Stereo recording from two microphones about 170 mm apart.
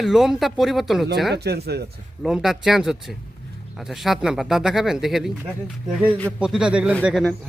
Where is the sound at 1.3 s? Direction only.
70° right (ahead or behind).